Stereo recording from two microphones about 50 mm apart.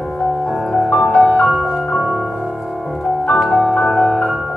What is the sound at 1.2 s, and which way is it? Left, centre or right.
Music, centre.